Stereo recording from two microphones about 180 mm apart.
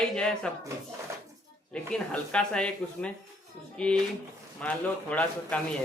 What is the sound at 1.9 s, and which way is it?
A man's voice, 5° left (ahead or behind).